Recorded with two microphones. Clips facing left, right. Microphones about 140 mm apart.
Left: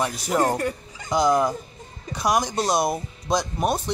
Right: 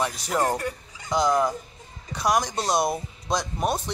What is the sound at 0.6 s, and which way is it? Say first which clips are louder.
Speech: left 4 dB; 25° left (ahead or behind).